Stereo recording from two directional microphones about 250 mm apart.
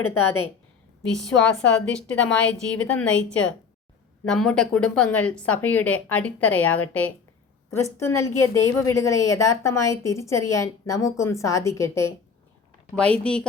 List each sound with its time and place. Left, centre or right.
0.0 s a woman's voice: centre
4.3 s a woman's voice: centre